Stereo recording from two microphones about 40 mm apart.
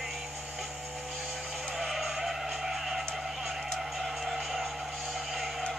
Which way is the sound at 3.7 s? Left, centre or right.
Centre.